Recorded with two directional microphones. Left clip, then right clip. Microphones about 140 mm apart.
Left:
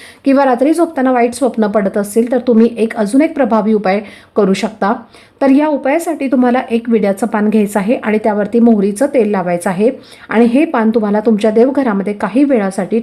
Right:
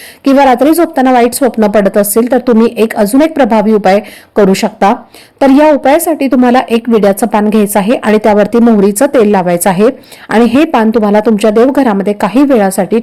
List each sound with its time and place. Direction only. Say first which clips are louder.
0.3 s a woman's voice: right 5 dB; 20° right (ahead or behind)